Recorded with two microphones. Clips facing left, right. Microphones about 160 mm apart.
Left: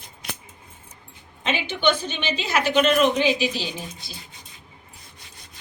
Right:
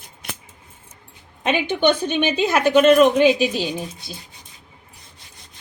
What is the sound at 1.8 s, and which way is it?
A woman's voice, 55° right (ahead or behind).